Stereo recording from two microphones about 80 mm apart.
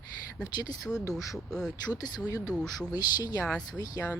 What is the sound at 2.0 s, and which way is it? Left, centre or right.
Speech, left.